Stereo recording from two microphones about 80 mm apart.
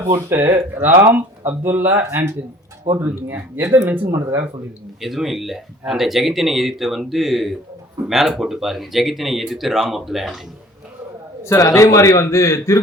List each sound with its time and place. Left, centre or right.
0.0 s speech: right
4.1 s speech: right
4.9 s speech: centre
11.4 s a man's voice: left